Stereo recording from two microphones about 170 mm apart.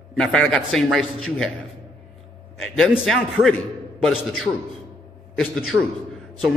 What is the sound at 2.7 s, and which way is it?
Speech, centre (ahead or behind).